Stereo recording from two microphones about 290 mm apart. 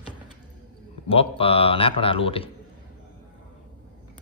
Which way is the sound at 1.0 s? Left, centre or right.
Centre.